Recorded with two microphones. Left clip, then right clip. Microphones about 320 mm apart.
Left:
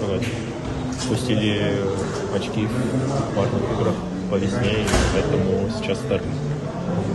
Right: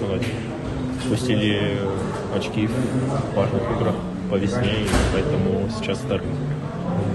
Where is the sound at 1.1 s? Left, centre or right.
Centre.